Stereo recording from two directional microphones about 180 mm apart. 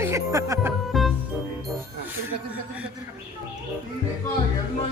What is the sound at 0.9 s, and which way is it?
Music, centre (ahead or behind).